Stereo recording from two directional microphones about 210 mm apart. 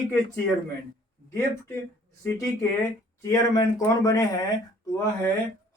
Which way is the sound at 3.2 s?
15° left (ahead or behind).